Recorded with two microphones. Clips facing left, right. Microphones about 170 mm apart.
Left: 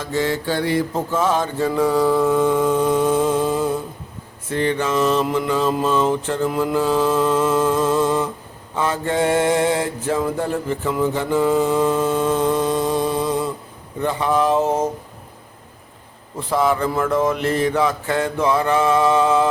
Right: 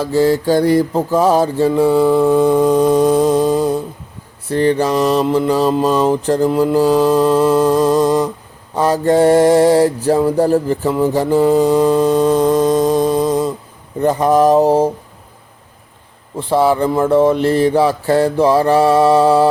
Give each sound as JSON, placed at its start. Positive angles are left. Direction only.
{"t": 0.0, "sound": "mantra", "side_deg": -35}
{"t": 16.4, "sound": "mantra", "side_deg": -30}